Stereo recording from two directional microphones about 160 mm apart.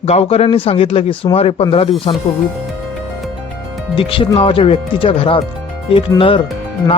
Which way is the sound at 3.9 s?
35° left (ahead or behind).